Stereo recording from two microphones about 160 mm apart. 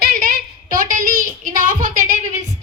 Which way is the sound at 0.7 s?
60° right (ahead or behind).